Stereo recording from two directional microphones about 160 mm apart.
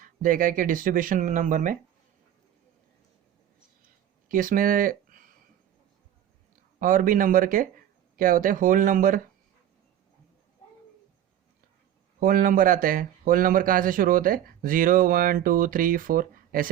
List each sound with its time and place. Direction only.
0.0 s speech: 60° right (ahead or behind)
4.3 s speech: 60° right (ahead or behind)
6.7 s speech: 60° right (ahead or behind)
12.2 s speech: 60° right (ahead or behind)